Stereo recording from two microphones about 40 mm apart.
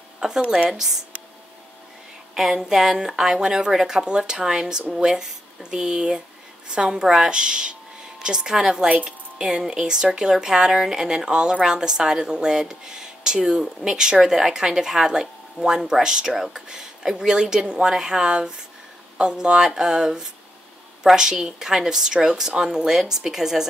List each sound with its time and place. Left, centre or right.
0.2 s a woman's voice: right
0.7 s speech: centre
2.5 s a woman's voice: centre
8.8 s a woman's voice: right
9.4 s speech: centre